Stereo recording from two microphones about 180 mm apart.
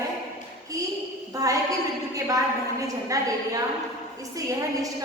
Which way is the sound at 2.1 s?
20° right (ahead or behind).